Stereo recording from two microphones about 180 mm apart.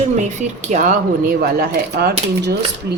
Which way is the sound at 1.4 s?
60° right (ahead or behind).